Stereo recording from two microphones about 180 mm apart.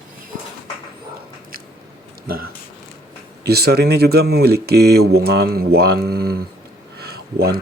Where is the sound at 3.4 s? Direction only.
65° right (ahead or behind).